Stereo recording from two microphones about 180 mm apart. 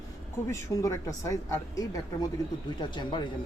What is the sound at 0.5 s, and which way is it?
A woman's voice, 20° left (ahead or behind).